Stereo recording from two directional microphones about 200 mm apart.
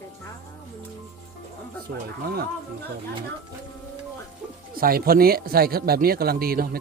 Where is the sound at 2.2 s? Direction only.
50° right (ahead or behind).